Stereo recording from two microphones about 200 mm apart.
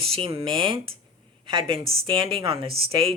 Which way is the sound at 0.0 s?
30° right (ahead or behind).